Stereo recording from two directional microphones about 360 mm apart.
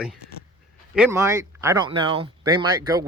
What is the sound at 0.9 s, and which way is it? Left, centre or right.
Speech, centre.